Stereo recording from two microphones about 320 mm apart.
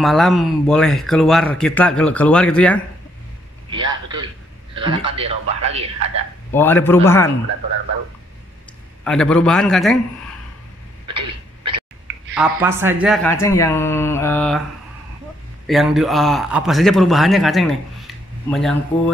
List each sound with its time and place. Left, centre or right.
0.0 s speech: centre
3.7 s a sound: centre
4.7 s speech: centre
6.5 s speech: centre
9.0 s speech: centre
12.4 s speech: centre
15.6 s speech: centre